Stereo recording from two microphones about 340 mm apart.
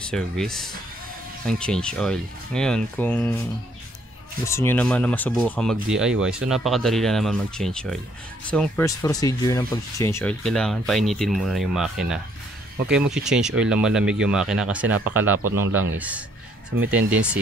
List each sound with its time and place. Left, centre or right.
0.0 s speech: centre
4.5 s speech: centre
15.7 s a man's voice: right
16.9 s speech: centre